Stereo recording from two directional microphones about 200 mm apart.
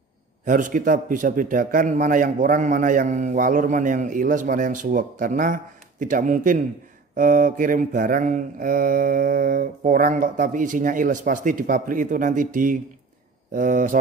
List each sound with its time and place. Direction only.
0.5 s a man's voice: 40° right (ahead or behind)
7.2 s mantra: 40° right (ahead or behind)
13.5 s a man's voice: 40° right (ahead or behind)